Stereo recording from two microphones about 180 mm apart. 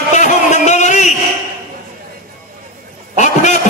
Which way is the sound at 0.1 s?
40° left (ahead or behind).